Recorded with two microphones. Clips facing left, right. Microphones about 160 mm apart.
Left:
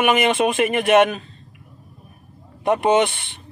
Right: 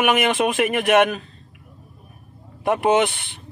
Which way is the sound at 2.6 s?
Centre (ahead or behind).